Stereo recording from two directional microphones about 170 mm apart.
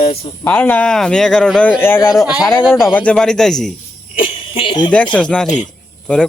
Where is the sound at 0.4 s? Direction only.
10° left (ahead or behind).